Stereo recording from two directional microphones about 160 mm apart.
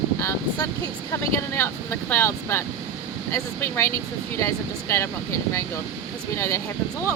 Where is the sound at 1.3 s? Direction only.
15° left (ahead or behind).